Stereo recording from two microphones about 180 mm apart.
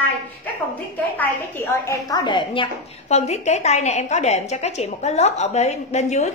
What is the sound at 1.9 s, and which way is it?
A woman's voice, 25° left (ahead or behind).